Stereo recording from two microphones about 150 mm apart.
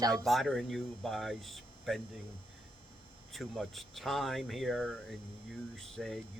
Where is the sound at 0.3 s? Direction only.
Centre (ahead or behind).